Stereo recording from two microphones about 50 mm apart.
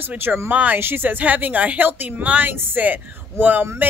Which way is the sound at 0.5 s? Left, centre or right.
Right.